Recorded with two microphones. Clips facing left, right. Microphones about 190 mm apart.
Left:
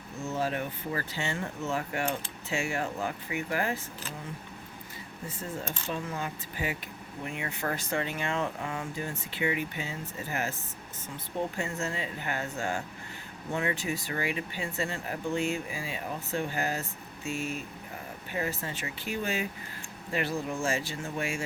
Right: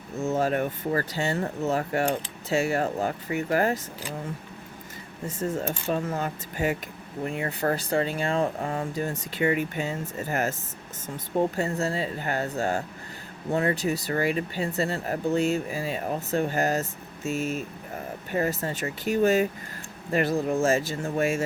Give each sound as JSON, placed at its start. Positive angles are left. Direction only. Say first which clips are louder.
{"t": 0.3, "sound": "speech", "louder": "right 5 dB", "side_deg": -50}
{"t": 5.4, "sound": "speech", "louder": "right 9 dB", "side_deg": -45}